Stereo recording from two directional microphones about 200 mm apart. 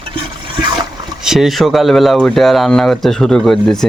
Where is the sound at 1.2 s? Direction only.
Centre (ahead or behind).